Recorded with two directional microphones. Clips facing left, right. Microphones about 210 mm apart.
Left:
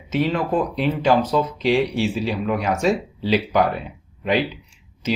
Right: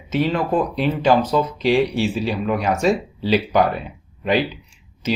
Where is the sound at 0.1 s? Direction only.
35° right (ahead or behind).